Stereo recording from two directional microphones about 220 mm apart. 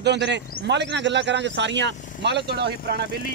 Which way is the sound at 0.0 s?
50° right (ahead or behind).